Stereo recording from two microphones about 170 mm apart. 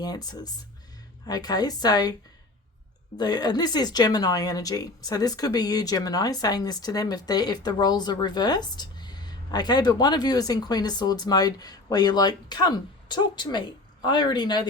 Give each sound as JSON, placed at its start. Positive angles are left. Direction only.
{"t": 0.0, "sound": "a woman's voice", "side_deg": 25}
{"t": 3.2, "sound": "a woman's voice", "side_deg": 25}